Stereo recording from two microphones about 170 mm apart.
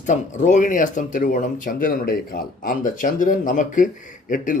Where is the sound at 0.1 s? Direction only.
45° left (ahead or behind).